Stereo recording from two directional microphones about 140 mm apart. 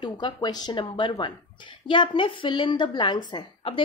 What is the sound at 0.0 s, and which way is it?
A woman's voice, 30° left (ahead or behind).